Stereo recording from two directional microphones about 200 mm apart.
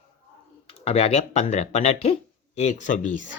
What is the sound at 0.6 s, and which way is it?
Speech, 30° left (ahead or behind).